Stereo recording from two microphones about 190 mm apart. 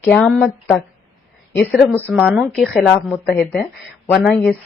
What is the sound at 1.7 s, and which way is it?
Speech, 10° right (ahead or behind).